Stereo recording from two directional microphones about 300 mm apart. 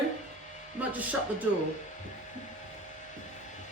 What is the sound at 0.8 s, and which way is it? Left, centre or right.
Speech, centre.